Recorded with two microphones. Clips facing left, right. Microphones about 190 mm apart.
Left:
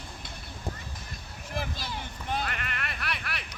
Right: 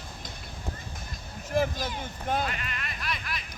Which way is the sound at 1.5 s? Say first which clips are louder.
Right 8 dB; 45° right (ahead or behind).